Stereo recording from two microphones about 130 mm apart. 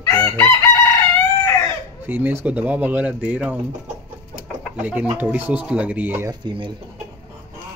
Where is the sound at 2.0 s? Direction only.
15° right (ahead or behind).